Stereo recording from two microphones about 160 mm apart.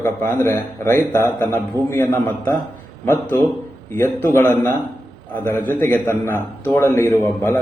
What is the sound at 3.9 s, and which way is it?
A man's voice, 15° left (ahead or behind).